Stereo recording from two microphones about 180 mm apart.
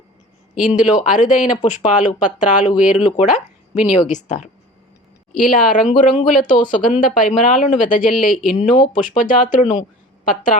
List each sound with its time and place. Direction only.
0.5 s speech: 45° left (ahead or behind)